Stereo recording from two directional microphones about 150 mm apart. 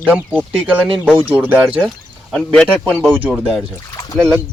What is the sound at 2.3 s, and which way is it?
Speech, 5° left (ahead or behind).